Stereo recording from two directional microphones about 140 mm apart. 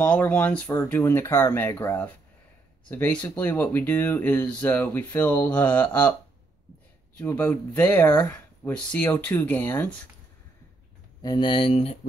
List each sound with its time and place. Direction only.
0.0 s speech: 10° left (ahead or behind)
7.2 s speech: 10° left (ahead or behind)
11.2 s speech: 35° left (ahead or behind)